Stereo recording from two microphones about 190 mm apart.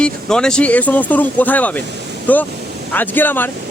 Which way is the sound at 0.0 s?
5° left (ahead or behind).